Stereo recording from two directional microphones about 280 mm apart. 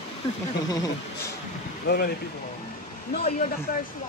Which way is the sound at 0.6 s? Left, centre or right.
Centre.